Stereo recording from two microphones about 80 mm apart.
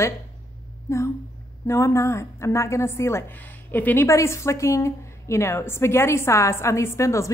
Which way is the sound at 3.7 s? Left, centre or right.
Left.